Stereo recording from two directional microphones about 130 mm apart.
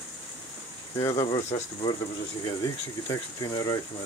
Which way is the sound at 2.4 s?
30° left (ahead or behind).